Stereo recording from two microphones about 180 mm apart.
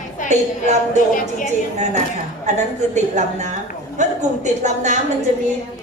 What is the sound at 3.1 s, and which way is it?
A man's voice, 40° right (ahead or behind).